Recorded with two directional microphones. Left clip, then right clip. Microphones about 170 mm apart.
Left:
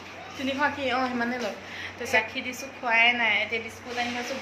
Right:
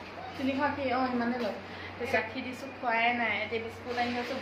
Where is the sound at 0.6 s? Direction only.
20° left (ahead or behind).